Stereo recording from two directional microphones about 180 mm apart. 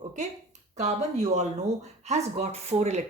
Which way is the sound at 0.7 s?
40° right (ahead or behind).